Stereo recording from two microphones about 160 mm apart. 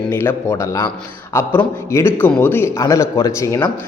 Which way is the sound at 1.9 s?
15° left (ahead or behind).